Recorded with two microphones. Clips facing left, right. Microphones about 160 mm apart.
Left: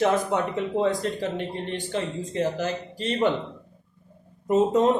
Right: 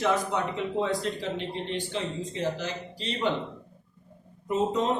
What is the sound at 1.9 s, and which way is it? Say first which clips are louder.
Speech: left 3 dB; 50° left (ahead or behind).